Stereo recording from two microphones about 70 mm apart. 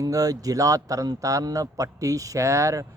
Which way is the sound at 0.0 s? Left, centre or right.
Right.